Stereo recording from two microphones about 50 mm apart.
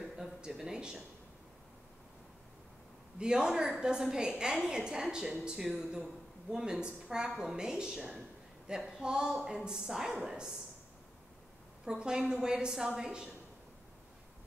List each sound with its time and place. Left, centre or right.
0.5 s a sound: centre
3.2 s a woman's voice: centre
11.8 s a woman's voice: centre